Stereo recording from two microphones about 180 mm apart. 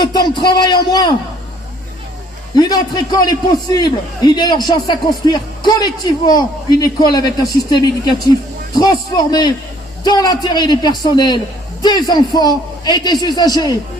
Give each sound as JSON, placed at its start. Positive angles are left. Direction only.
{"t": 0.0, "sound": "a man's voice", "side_deg": 25}
{"t": 2.6, "sound": "a man's voice", "side_deg": 20}
{"t": 8.7, "sound": "a man's voice", "side_deg": 25}